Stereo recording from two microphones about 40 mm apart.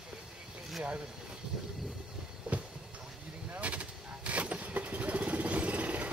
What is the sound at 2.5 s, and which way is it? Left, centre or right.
Train, right.